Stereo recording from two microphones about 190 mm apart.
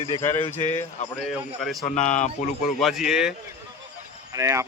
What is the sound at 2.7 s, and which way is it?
Speech, centre (ahead or behind).